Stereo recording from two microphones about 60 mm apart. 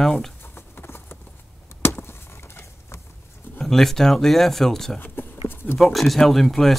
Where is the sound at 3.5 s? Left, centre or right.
Centre.